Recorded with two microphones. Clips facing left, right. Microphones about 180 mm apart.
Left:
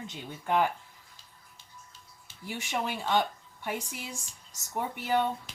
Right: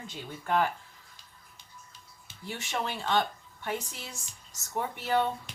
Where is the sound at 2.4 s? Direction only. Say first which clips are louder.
Left 1 dB; 10° left (ahead or behind).